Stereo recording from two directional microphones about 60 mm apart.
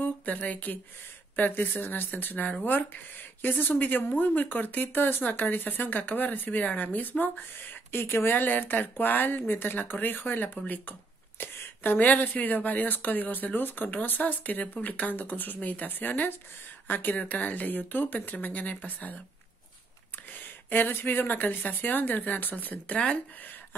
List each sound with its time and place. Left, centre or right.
0.0 s speech: left
20.4 s speech: left